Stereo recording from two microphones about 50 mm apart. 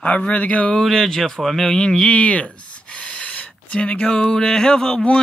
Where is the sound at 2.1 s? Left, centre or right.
Left.